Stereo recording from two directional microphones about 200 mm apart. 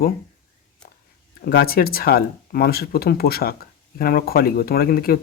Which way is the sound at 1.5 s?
50° left (ahead or behind).